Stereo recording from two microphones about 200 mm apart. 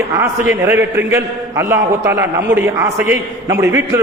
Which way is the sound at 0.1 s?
15° right (ahead or behind).